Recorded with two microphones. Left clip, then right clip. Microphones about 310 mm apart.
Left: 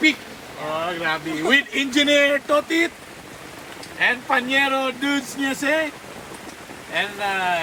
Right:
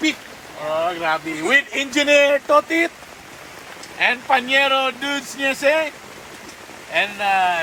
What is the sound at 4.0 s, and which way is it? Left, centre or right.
Speech, right.